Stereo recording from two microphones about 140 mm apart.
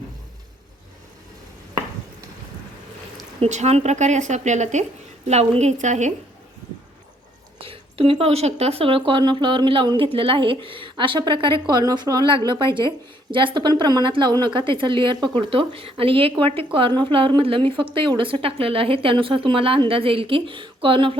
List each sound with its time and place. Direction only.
3.4 s speech: 50° right (ahead or behind)
7.6 s speech: 40° right (ahead or behind)